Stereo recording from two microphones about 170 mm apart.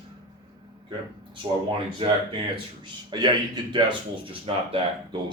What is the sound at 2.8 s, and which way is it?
Speech, 25° right (ahead or behind).